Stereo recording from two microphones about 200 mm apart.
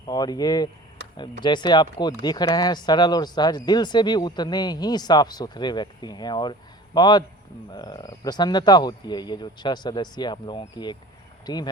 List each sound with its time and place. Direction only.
0.1 s speech: 20° left (ahead or behind)